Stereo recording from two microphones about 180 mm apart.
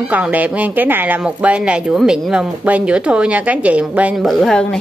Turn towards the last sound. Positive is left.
turn(degrees=5)  # may be behind; listen again after turning